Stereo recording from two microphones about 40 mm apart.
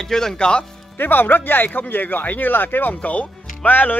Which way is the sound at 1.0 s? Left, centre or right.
Left.